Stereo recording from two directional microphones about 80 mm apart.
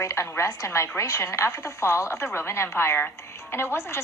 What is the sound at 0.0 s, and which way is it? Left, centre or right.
A woman's voice, left.